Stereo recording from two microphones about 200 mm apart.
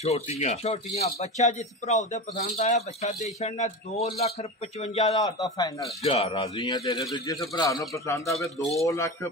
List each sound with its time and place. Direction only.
0.0 s speech: 30° left (ahead or behind)
5.2 s speech: 20° left (ahead or behind)
6.0 s speech: 30° left (ahead or behind); by 9.3 s 15° left (ahead or behind)